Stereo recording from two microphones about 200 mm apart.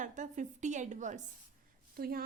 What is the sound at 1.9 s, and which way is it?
Speech, 50° right (ahead or behind).